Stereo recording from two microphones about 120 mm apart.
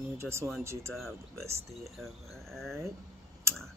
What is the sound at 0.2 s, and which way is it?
Speech, 20° right (ahead or behind).